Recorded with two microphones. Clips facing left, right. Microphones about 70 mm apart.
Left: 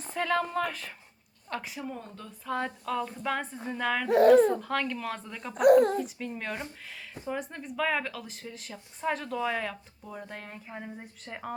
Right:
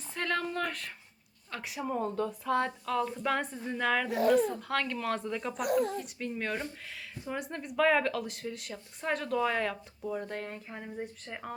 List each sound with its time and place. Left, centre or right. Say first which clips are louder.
0.1 s speech: left 4 dB; centre
4.1 s a child's voice: left 10 dB; left
4.7 s speech: even; centre
5.5 s a child's voice: left 11 dB; left
6.0 s speech: left 2 dB; centre